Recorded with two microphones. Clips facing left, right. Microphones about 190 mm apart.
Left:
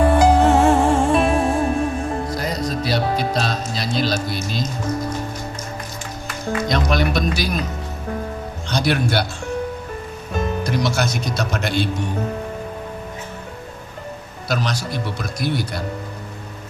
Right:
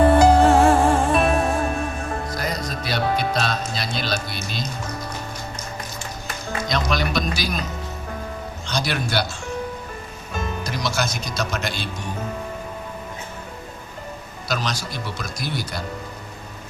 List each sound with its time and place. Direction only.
0.1 s music: 15° left (ahead or behind); by 4.7 s 40° left (ahead or behind)
6.7 s music: 55° left (ahead or behind)
8.7 s speech: 55° left (ahead or behind)
10.3 s speech: 60° left (ahead or behind)
14.4 s speech: 55° left (ahead or behind)